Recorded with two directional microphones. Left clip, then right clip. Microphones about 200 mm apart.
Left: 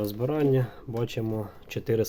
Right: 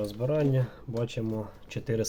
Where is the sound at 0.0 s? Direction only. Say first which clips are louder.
Left 2 dB; 45° left (ahead or behind).